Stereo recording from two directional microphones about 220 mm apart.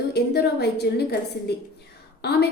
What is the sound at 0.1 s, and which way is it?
Speech, 50° left (ahead or behind).